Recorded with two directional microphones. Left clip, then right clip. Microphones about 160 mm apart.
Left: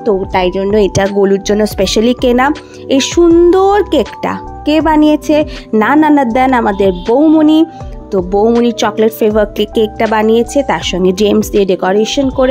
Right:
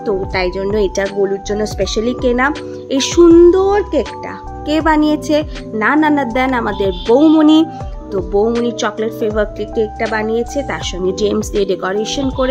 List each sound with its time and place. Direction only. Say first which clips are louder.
0.0 s speech: left 5 dB; 40° left (ahead or behind)
2.9 s music: left 1 dB; 30° left (ahead or behind)
3.4 s speech: left 3 dB; 70° left (ahead or behind)
4.2 s speech: left 8 dB; 50° left (ahead or behind)
7.2 s music: left 1 dB; 40° left (ahead or behind)
8.6 s speech: left 6 dB; 45° left (ahead or behind)